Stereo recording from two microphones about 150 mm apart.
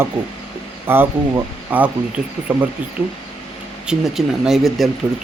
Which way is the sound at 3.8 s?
Centre (ahead or behind).